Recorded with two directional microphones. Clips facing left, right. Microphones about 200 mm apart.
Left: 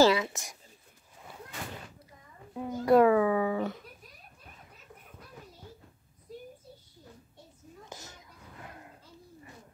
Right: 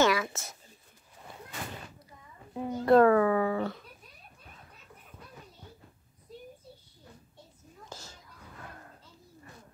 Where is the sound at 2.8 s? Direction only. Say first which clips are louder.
Right 1 dB; 10° left (ahead or behind).